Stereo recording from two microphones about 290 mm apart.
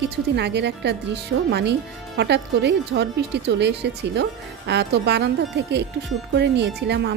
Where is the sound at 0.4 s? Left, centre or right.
Right.